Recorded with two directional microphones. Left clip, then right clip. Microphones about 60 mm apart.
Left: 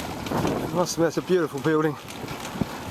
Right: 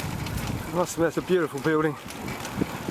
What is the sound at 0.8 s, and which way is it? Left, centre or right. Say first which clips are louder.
Speech: even; centre.